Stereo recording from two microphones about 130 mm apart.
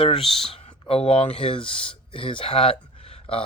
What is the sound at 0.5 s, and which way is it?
Speech, 50° left (ahead or behind).